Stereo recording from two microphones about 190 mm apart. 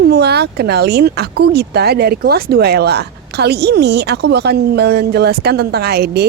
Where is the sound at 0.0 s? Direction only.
60° right (ahead or behind).